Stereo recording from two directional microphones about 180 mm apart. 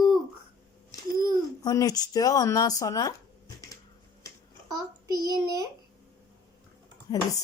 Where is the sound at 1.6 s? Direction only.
20° left (ahead or behind).